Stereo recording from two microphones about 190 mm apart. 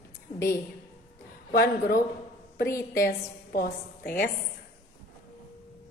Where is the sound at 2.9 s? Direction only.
50° left (ahead or behind).